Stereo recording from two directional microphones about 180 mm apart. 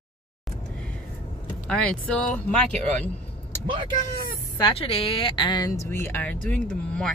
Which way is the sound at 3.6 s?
30° right (ahead or behind).